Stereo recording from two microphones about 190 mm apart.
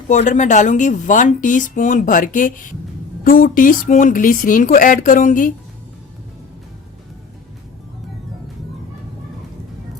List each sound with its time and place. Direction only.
0.1 s speech: 40° left (ahead or behind)